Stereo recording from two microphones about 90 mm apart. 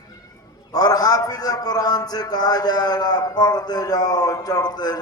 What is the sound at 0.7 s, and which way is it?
A man's voice, 45° left (ahead or behind).